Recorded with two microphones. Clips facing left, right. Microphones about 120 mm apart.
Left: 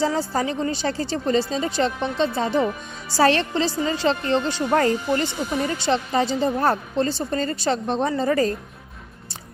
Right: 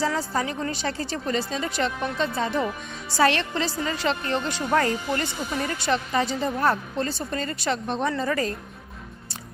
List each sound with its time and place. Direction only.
0.0 s a woman's voice: 30° left (ahead or behind)